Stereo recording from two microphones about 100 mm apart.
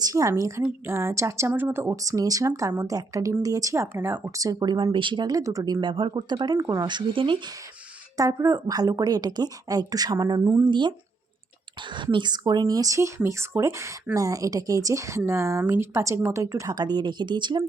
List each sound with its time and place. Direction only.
0.0 s speech: 35° right (ahead or behind)
4.4 s speech: 40° right (ahead or behind)
4.9 s speech: 55° right (ahead or behind)
5.4 s speech: 35° right (ahead or behind)
5.8 s speech: 55° right (ahead or behind)
6.6 s speech: 35° right (ahead or behind)
6.8 s speech: 50° right (ahead or behind)
8.1 s speech: 35° right (ahead or behind); by 10.9 s 50° right (ahead or behind)
12.1 s speech: 45° right (ahead or behind)